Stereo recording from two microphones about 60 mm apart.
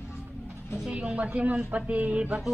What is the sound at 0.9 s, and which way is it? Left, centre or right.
Speech, centre.